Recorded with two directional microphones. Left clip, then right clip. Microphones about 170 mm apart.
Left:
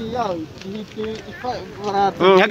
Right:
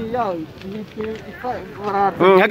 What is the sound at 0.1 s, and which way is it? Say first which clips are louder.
Speech: right 1 dB; 5° left (ahead or behind).